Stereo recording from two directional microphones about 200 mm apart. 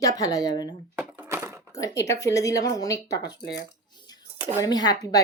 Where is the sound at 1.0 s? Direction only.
10° right (ahead or behind).